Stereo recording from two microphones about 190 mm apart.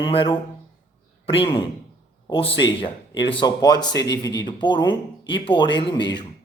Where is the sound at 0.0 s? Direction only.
25° left (ahead or behind).